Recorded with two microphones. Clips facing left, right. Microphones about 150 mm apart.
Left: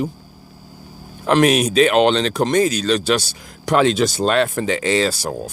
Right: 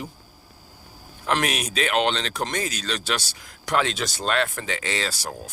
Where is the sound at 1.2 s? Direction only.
35° left (ahead or behind).